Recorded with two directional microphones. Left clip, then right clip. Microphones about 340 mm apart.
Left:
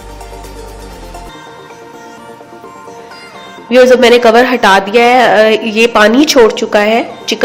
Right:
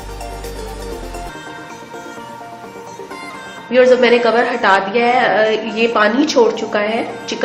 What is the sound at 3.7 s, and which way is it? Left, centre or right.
Speech, left.